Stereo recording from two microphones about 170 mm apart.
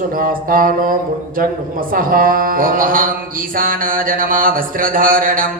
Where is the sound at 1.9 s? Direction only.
55° right (ahead or behind).